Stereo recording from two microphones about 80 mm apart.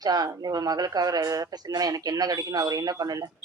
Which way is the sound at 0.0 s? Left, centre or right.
Right.